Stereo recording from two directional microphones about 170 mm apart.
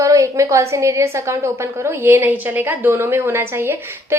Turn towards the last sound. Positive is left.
turn(degrees=-15)  # may be behind; listen again after turning